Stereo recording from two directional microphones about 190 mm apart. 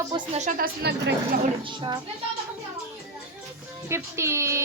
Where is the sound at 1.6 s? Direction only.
25° right (ahead or behind).